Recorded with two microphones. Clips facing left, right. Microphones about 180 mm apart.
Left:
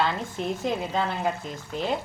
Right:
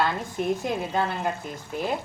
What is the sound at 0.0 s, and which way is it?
A woman's voice, 10° right (ahead or behind).